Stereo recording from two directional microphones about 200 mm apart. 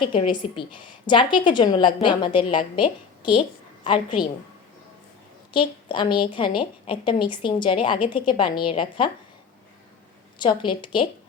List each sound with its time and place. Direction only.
0.0 s a woman's voice: 25° left (ahead or behind)
5.5 s a woman's voice: 25° left (ahead or behind)
10.3 s a woman's voice: 25° left (ahead or behind)